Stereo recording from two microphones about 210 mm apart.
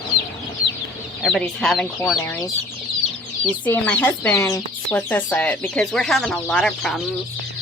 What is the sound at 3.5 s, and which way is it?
Speech, 5° left (ahead or behind).